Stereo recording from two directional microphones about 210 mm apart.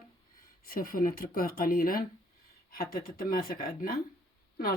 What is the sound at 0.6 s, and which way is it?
Speech, 45° left (ahead or behind).